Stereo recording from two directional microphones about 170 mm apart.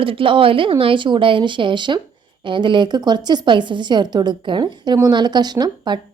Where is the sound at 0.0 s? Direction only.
30° right (ahead or behind).